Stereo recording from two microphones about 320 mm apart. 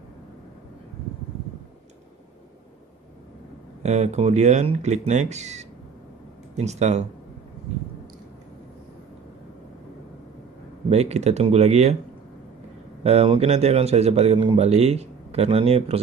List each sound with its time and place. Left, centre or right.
3.8 s a man's voice: right
10.9 s a man's voice: centre
13.0 s a man's voice: centre